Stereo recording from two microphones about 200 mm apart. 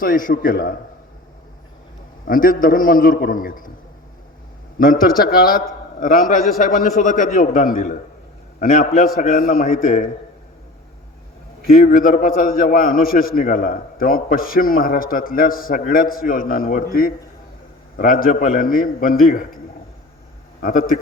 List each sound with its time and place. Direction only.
0.0 s a man's voice: 45° left (ahead or behind)
2.2 s a man's voice: 45° left (ahead or behind)
4.8 s a man's voice: 45° left (ahead or behind)
11.7 s a man's voice: 45° left (ahead or behind)
20.6 s a man's voice: 45° left (ahead or behind)